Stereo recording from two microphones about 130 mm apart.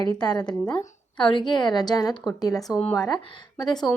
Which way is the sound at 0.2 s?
35° left (ahead or behind).